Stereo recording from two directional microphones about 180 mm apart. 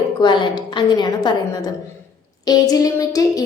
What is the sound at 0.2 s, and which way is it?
A woman's voice, 25° left (ahead or behind).